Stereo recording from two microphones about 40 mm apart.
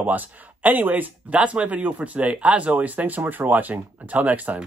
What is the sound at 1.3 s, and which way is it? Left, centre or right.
Speech, right.